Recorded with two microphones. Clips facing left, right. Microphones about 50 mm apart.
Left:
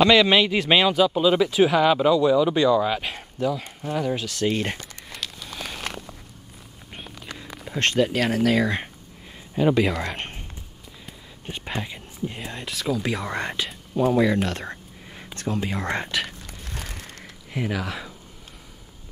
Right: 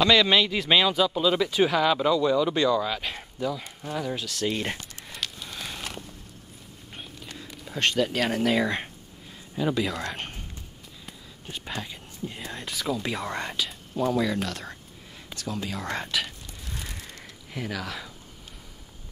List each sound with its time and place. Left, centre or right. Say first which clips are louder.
0.1 s speech: left 3 dB; centre
5.2 s a sound: right 1 dB; centre
5.9 s walk: left 5 dB; left
7.7 s a sound: left 4 dB; left
8.0 s speech: left 5 dB; centre
8.6 s speech: left 2 dB; centre
9.6 s speech: left 6 dB; left
11.4 s speech: left 4 dB; left
13.0 s speech: left 3 dB; centre
13.4 s speech: left 3 dB; left
14.5 s a sound: left 5 dB; left
15.3 s speech: left 5 dB; left
16.4 s a sound: left 2 dB; left
17.5 s speech: left 5 dB; centre